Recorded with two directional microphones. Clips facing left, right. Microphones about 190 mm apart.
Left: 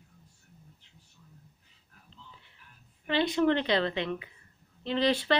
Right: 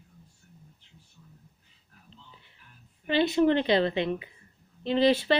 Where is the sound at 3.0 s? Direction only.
15° right (ahead or behind).